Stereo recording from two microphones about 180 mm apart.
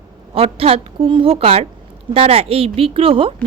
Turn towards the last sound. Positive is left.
turn(degrees=-30)  # may be behind; listen again after turning